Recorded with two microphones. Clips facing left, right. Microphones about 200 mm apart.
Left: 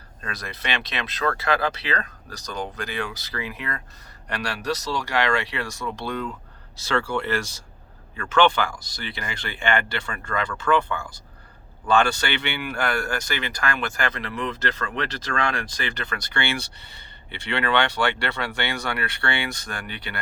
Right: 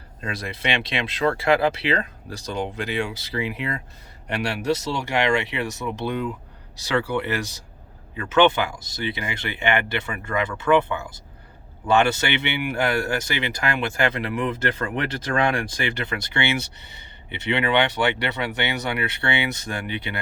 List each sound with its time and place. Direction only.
0.2 s speech: 25° right (ahead or behind)
15.5 s speech: 25° right (ahead or behind)